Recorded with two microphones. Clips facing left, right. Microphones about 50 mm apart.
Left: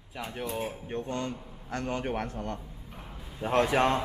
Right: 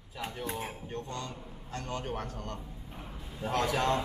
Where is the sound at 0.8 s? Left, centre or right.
Left.